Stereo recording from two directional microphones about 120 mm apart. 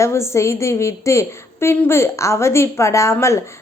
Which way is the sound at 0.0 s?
25° left (ahead or behind).